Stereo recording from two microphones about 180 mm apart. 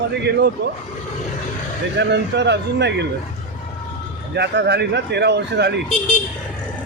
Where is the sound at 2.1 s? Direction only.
70° right (ahead or behind).